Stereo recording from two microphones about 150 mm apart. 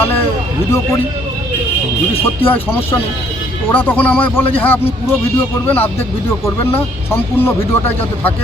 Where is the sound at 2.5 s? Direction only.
15° left (ahead or behind).